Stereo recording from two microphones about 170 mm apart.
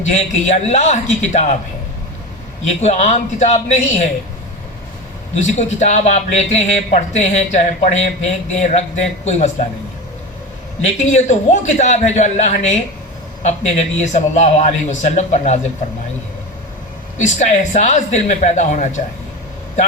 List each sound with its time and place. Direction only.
0.1 s a man's voice: 40° left (ahead or behind)
2.8 s a man's voice: 40° left (ahead or behind)
5.4 s speech: 45° left (ahead or behind)
10.8 s a man's voice: 45° left (ahead or behind)
17.2 s a man's voice: 45° left (ahead or behind)